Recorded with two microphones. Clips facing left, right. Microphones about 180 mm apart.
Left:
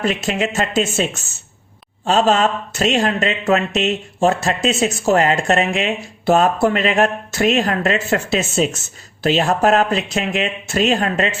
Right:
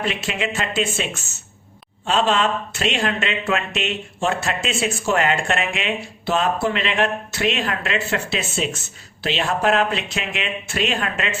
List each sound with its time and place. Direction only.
0.0 s speech: 40° left (ahead or behind)